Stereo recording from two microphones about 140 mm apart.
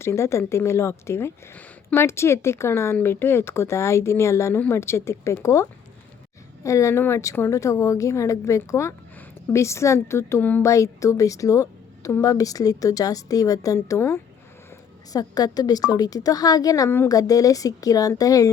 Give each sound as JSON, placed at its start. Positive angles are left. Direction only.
{"t": 0.0, "sound": "speech", "side_deg": 20}